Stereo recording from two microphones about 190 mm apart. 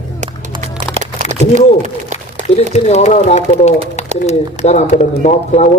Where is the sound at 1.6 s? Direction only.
40° right (ahead or behind).